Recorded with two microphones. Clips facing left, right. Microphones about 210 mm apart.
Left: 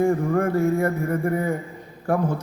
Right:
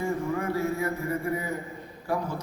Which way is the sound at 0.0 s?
50° left (ahead or behind).